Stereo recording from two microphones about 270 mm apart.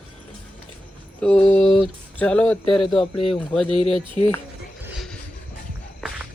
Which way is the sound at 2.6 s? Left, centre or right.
Centre.